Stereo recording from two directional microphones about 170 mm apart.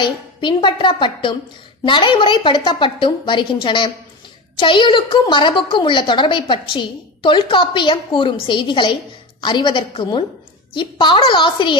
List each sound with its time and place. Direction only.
0.0 s a woman's voice: 30° left (ahead or behind)